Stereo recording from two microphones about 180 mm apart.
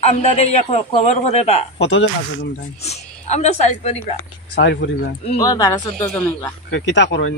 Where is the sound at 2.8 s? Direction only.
35° left (ahead or behind).